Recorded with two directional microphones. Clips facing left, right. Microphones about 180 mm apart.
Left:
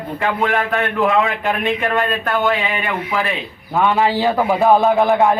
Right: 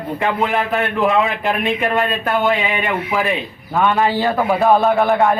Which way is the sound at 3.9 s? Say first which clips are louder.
Left 1 dB; 15° left (ahead or behind).